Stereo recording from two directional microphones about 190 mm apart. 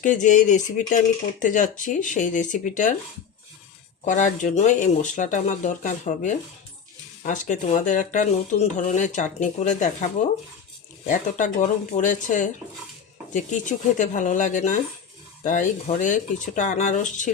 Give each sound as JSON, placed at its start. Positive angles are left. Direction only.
{"t": 0.0, "sound": "speech", "side_deg": 40}
{"t": 4.0, "sound": "speech", "side_deg": 40}